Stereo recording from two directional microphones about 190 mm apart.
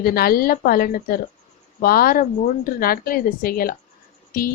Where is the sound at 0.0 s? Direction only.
50° left (ahead or behind).